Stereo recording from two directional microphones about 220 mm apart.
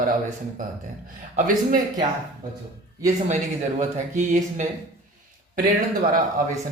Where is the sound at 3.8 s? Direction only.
35° right (ahead or behind).